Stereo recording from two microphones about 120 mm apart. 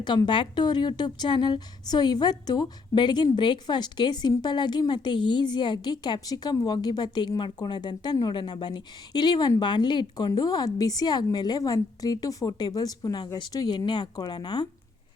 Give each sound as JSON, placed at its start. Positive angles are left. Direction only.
{"t": 0.0, "sound": "a woman's voice", "side_deg": 40}